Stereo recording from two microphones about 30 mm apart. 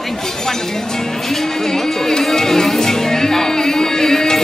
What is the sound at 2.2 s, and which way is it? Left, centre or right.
Music, centre.